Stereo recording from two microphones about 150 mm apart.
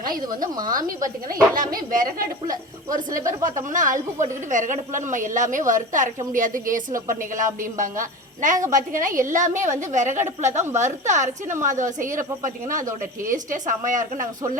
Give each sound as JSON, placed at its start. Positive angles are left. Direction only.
{"t": 0.0, "sound": "a woman's voice", "side_deg": -65}